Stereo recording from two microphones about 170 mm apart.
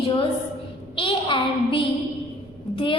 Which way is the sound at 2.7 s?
30° left (ahead or behind).